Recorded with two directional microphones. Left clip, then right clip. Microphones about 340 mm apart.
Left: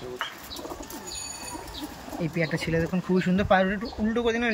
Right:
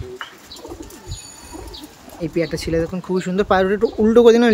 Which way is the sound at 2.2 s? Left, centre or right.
Centre.